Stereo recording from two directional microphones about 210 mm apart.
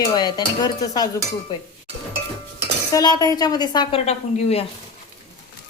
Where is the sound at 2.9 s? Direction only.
20° left (ahead or behind).